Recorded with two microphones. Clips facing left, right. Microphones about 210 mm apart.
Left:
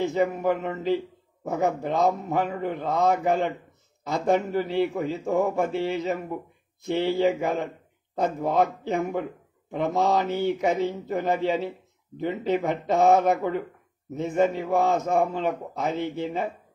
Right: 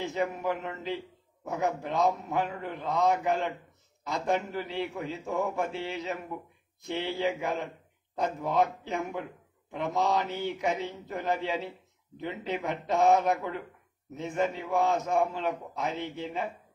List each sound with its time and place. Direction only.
0.1 s a man's voice: 45° left (ahead or behind)